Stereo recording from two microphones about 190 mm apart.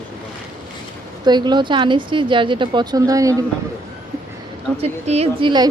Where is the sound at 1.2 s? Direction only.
20° right (ahead or behind).